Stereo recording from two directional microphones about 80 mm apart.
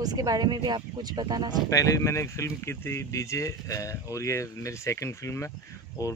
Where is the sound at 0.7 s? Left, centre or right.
Right.